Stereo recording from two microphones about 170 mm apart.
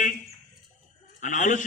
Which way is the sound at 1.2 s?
45° left (ahead or behind).